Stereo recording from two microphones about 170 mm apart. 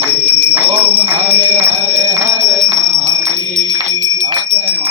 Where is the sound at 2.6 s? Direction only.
40° right (ahead or behind).